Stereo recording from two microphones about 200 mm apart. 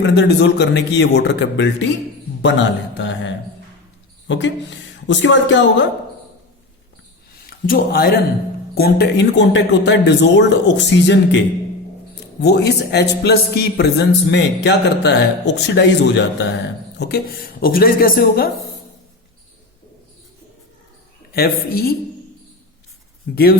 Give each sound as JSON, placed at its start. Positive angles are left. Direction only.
{"t": 0.0, "sound": "a man's voice", "side_deg": 60}
{"t": 7.7, "sound": "a woman's voice", "side_deg": 50}
{"t": 17.0, "sound": "a woman's voice", "side_deg": 50}
{"t": 21.3, "sound": "a woman's voice", "side_deg": 50}
{"t": 23.3, "sound": "a woman's voice", "side_deg": 50}